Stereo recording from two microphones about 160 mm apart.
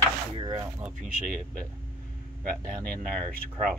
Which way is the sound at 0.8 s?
Centre (ahead or behind).